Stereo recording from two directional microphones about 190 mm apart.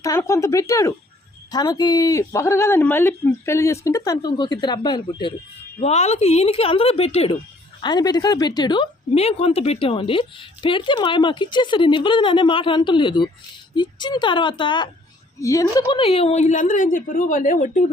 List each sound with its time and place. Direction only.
0.0 s a woman's voice: 15° left (ahead or behind)
5.8 s a woman's voice: 35° left (ahead or behind)
7.8 s a woman's voice: 20° left (ahead or behind)
15.9 s a woman's voice: 30° left (ahead or behind)